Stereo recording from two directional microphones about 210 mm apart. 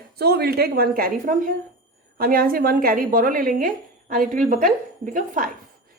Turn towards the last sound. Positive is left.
turn(degrees=-40)  # may be behind; listen again after turning